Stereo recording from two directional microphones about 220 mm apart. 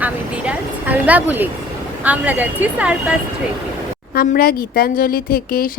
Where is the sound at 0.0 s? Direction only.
5° right (ahead or behind).